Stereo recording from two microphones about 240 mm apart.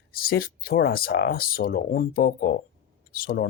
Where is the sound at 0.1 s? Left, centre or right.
Left.